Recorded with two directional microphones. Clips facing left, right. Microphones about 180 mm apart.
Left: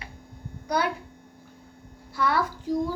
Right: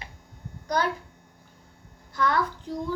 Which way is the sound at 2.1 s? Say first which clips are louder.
Even; 10° left (ahead or behind).